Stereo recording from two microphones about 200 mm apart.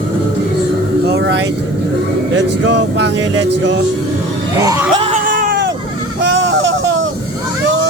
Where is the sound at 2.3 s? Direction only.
65° right (ahead or behind).